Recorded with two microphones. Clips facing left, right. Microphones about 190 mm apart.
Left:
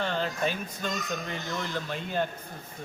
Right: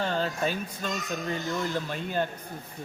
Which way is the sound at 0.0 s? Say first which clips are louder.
Right 1 dB; 40° right (ahead or behind).